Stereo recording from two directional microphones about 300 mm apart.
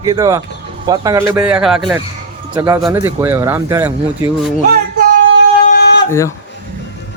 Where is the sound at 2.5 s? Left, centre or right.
Centre.